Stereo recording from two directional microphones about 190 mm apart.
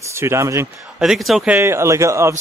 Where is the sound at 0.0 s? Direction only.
15° right (ahead or behind).